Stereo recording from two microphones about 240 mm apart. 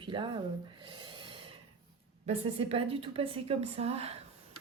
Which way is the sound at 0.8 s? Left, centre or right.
Centre.